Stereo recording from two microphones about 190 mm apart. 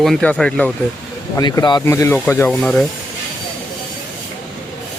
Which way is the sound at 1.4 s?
20° left (ahead or behind).